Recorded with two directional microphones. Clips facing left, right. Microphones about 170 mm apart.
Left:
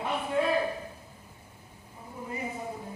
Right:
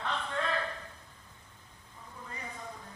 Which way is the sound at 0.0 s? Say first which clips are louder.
Left 7 dB; 10° left (ahead or behind).